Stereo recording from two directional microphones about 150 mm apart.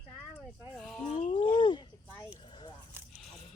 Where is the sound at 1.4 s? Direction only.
30° left (ahead or behind).